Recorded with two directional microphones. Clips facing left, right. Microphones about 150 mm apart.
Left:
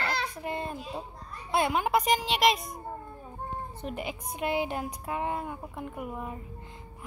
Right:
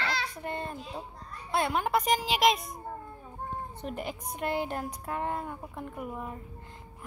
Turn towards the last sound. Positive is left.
turn(degrees=5)  # may be behind; listen again after turning